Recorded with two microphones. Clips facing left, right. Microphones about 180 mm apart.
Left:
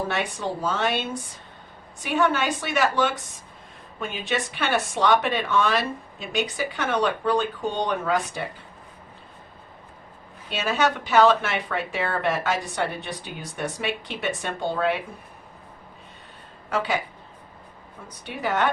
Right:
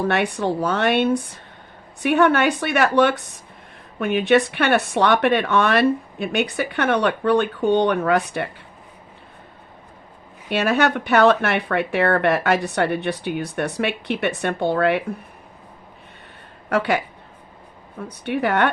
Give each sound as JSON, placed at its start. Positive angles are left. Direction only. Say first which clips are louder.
{"t": 0.1, "sound": "speech", "louder": "right 7 dB", "side_deg": -60}
{"t": 10.5, "sound": "speech", "louder": "right 5 dB", "side_deg": -60}
{"t": 16.6, "sound": "speech", "louder": "right 5 dB", "side_deg": -60}
{"t": 18.1, "sound": "speech", "louder": "right 6 dB", "side_deg": -60}